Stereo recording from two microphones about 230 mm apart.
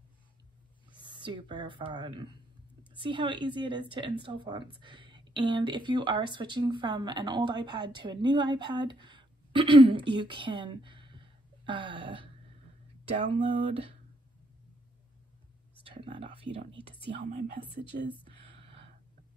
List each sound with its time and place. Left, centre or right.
0.9 s speech: centre
15.8 s speech: right
17.9 s speech: right